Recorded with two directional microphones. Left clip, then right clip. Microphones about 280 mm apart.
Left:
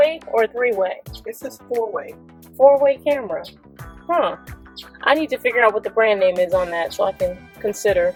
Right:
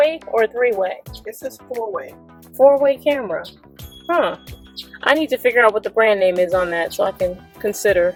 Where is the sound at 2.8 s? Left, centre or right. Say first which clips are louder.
Right 1 dB; centre.